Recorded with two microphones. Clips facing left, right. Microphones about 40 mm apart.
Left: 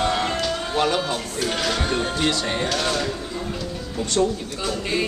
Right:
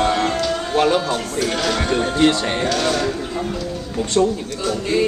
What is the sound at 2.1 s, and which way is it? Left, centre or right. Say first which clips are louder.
Speech: right 6 dB; right.